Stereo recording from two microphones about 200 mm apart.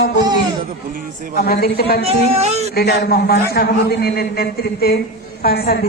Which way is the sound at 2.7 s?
50° left (ahead or behind).